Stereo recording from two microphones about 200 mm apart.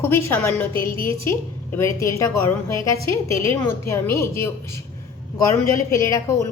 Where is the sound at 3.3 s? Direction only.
15° left (ahead or behind).